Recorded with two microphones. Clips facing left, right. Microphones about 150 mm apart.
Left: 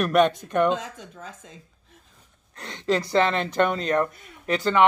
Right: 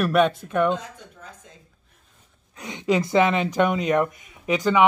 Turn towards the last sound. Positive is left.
turn(degrees=-10)  # may be behind; listen again after turning